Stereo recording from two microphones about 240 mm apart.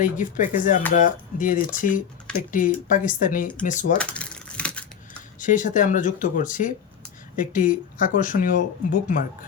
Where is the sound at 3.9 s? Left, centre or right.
Centre.